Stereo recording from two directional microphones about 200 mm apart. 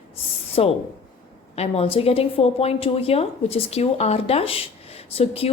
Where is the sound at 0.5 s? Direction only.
30° left (ahead or behind).